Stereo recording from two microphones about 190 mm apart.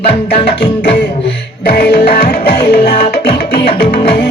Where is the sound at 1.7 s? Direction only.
60° left (ahead or behind).